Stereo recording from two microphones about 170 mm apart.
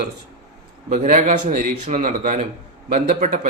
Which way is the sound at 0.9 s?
50° right (ahead or behind).